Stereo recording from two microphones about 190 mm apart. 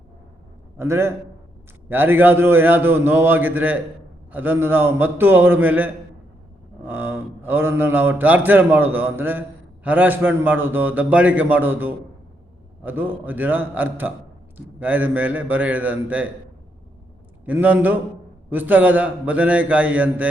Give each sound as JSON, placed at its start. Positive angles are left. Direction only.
{"t": 0.8, "sound": "a man's voice", "side_deg": -15}
{"t": 17.4, "sound": "a man's voice", "side_deg": -10}